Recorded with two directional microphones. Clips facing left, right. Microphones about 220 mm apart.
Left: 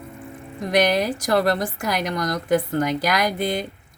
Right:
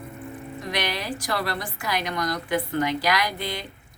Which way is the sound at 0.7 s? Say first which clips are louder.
Left 10 dB; 45° left (ahead or behind).